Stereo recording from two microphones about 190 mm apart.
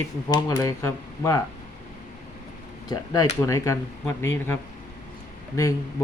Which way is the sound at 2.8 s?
20° left (ahead or behind).